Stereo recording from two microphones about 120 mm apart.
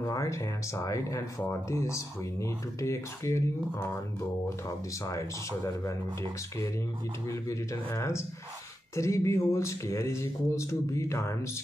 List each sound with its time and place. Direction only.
0.0 s speech: 25° left (ahead or behind)
4.6 s speech: 25° left (ahead or behind)
7.2 s speech: 25° left (ahead or behind)